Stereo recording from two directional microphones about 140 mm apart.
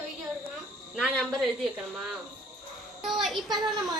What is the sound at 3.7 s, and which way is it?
Speech, 30° right (ahead or behind).